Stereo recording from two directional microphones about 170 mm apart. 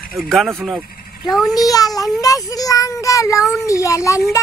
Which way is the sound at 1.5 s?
20° left (ahead or behind).